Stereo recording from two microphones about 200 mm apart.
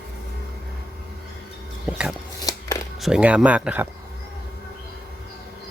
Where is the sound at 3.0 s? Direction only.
5° right (ahead or behind).